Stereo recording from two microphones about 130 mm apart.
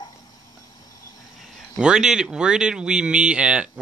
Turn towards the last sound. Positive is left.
turn(degrees=-10)  # may be behind; listen again after turning